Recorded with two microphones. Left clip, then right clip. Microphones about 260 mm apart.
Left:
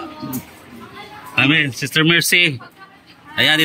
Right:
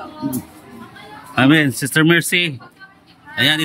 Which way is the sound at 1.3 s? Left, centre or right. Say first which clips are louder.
Right 1 dB; right.